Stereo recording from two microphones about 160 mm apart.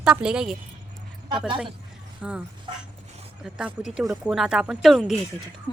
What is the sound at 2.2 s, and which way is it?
Speech, 10° right (ahead or behind).